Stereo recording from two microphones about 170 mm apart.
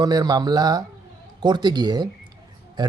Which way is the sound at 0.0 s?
25° right (ahead or behind).